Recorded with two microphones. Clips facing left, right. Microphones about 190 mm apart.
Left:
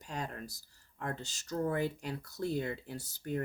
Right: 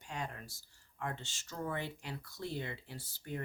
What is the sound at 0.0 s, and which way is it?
Speech, 40° left (ahead or behind).